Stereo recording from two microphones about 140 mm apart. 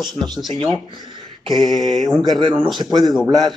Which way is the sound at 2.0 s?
25° right (ahead or behind).